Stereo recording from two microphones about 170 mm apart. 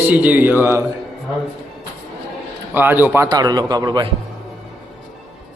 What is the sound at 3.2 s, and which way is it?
Speech, 25° right (ahead or behind).